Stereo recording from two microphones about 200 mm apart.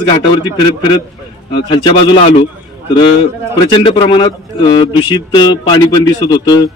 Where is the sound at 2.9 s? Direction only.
25° left (ahead or behind).